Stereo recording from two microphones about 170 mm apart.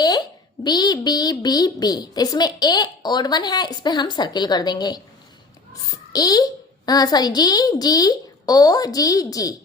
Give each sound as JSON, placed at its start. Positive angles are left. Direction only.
{"t": 0.6, "sound": "a child's voice", "side_deg": 25}
{"t": 6.1, "sound": "a child's voice", "side_deg": 20}